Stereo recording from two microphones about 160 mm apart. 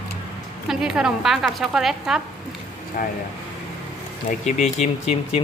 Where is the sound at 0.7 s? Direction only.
5° right (ahead or behind).